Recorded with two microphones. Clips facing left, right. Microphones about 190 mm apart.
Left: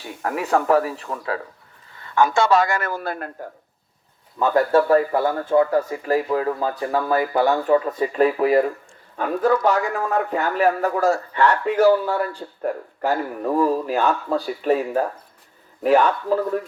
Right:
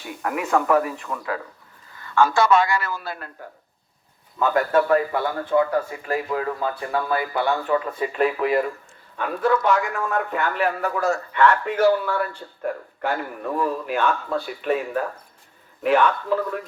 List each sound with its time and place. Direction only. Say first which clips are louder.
0.2 s a man's voice: left 1 dB; 35° left (ahead or behind)
2.0 s a sound: even; 20° left (ahead or behind)
2.5 s a man's voice: left 1 dB; 45° left (ahead or behind)
4.4 s a man's voice: left 2 dB; 35° left (ahead or behind)